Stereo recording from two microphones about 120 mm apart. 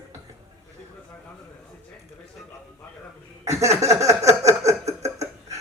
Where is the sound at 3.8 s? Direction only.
25° right (ahead or behind).